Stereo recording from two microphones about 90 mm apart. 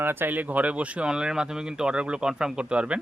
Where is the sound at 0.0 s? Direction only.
25° right (ahead or behind).